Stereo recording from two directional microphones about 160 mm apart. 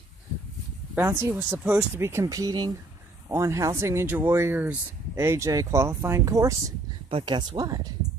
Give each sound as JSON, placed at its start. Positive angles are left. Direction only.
{"t": 0.9, "sound": "speech", "side_deg": -15}
{"t": 7.1, "sound": "speech", "side_deg": -30}